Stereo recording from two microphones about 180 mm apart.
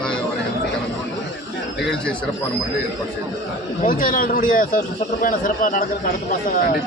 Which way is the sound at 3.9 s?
50° left (ahead or behind).